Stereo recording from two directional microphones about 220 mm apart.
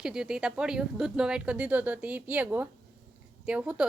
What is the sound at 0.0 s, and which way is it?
A woman's voice, centre (ahead or behind).